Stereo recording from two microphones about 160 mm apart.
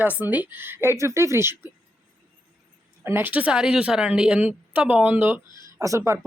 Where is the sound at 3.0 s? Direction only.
15° right (ahead or behind).